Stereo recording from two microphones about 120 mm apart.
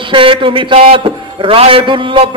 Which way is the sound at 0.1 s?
45° right (ahead or behind).